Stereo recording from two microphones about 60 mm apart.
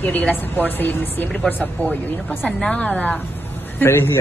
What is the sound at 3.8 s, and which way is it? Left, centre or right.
Speech, left.